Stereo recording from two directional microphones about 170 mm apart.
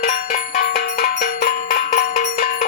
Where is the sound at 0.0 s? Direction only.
55° left (ahead or behind).